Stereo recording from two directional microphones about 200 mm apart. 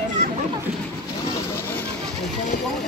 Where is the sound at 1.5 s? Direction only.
10° left (ahead or behind).